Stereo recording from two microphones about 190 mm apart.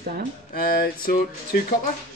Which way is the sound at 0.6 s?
50° left (ahead or behind).